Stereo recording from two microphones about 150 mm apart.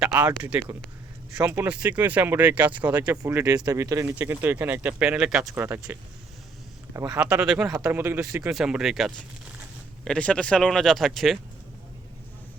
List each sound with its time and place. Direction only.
0.0 s speech: 10° right (ahead or behind)
7.1 s speech: 5° right (ahead or behind)
8.4 s speech: 5° right (ahead or behind)